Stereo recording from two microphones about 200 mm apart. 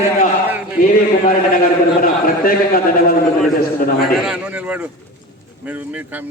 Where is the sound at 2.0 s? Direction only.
45° left (ahead or behind).